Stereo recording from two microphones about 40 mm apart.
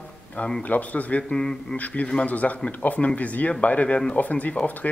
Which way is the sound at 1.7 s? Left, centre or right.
Left.